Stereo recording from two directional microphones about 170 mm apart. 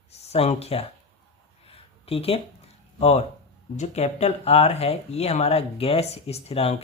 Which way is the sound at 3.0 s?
40° left (ahead or behind).